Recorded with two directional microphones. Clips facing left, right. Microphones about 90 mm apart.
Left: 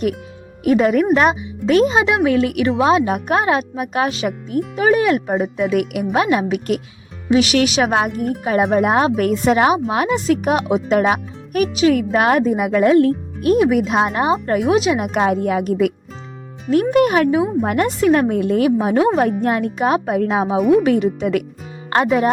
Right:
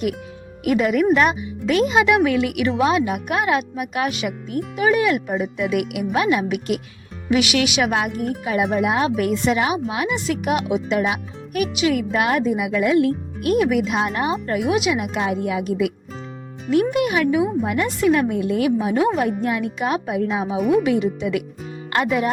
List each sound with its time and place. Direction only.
0.6 s speech: 35° left (ahead or behind)
16.9 s speech: 45° left (ahead or behind)
18.6 s speech: 35° left (ahead or behind); by 20.6 s 55° left (ahead or behind)
20.7 s speech: 35° left (ahead or behind)
20.9 s speech: 45° left (ahead or behind)
21.8 s speech: 35° left (ahead or behind)